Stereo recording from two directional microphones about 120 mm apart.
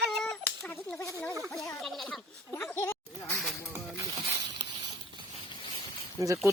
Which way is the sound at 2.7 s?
20° left (ahead or behind).